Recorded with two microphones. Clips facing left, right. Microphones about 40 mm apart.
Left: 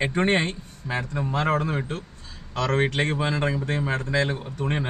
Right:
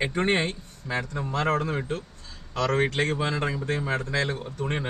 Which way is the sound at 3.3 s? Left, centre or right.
Centre.